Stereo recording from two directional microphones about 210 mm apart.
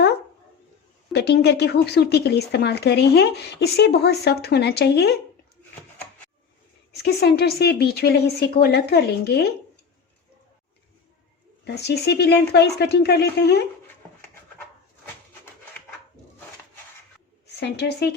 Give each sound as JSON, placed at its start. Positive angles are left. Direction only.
{"t": 1.1, "sound": "speech", "side_deg": 50}
{"t": 6.9, "sound": "speech", "side_deg": 50}
{"t": 11.6, "sound": "speech", "side_deg": 50}
{"t": 17.4, "sound": "a woman's voice", "side_deg": 50}